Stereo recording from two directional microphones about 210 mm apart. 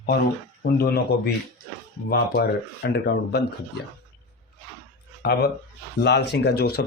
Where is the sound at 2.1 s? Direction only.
50° left (ahead or behind).